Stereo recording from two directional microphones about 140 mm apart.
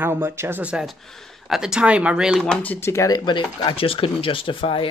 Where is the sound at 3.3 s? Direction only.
35° left (ahead or behind).